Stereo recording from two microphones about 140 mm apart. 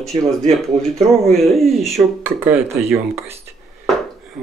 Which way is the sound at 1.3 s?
Centre (ahead or behind).